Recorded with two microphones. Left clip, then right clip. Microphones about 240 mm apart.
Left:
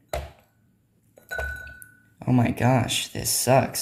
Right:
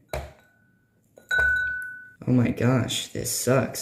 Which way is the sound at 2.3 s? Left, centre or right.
Centre.